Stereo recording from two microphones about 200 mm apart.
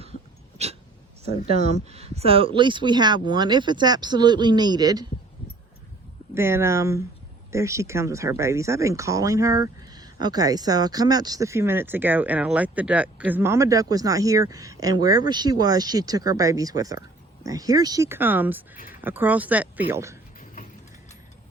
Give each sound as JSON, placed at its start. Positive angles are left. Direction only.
{"t": 0.6, "sound": "speech", "side_deg": -35}
{"t": 6.3, "sound": "speech", "side_deg": -10}